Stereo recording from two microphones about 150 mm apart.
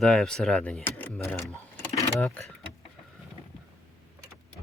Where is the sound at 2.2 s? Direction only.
10° left (ahead or behind).